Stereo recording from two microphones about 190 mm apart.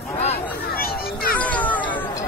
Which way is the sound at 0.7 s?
50° left (ahead or behind).